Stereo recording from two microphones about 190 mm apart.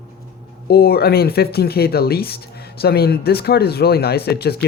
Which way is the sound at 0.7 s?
55° left (ahead or behind).